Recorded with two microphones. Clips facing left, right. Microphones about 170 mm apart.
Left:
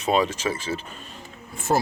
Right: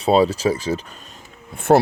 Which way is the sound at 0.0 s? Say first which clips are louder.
Right 6 dB; 35° right (ahead or behind).